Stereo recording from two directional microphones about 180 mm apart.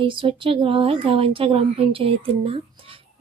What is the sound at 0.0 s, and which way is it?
Speech, 30° right (ahead or behind).